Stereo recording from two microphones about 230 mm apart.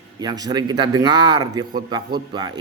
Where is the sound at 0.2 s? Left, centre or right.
Centre.